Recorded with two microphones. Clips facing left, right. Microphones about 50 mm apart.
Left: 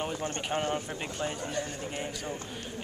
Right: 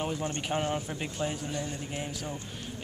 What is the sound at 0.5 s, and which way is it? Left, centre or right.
Speech, centre.